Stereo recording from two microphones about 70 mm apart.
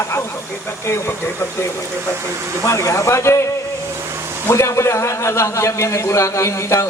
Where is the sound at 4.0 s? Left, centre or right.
Right.